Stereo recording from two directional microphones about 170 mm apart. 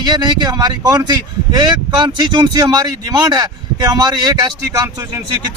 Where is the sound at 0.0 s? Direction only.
25° right (ahead or behind).